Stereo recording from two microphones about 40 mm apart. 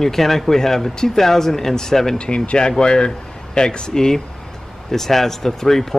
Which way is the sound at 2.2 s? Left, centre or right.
Left.